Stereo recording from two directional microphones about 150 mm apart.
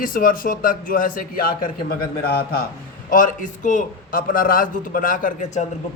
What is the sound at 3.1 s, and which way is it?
A man's voice, 60° left (ahead or behind).